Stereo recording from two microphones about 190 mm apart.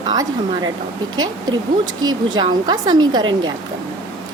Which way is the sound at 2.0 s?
20° right (ahead or behind).